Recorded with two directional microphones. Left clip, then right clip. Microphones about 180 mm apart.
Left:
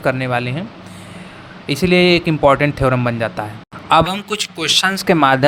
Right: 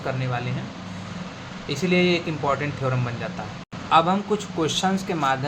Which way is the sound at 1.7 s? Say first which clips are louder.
Left 8 dB; 70° left (ahead or behind).